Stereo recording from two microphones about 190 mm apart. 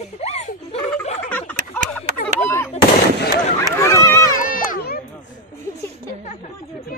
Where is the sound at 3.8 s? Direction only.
15° left (ahead or behind).